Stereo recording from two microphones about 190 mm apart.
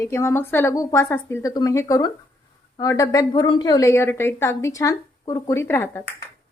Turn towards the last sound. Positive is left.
turn(degrees=15)  # may be behind; listen again after turning